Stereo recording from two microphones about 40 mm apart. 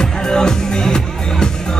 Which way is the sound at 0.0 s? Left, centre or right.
Centre.